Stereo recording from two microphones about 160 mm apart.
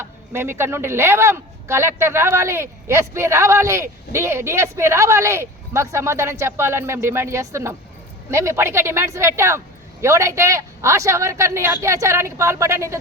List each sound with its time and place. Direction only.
0.0 s speech: 15° right (ahead or behind)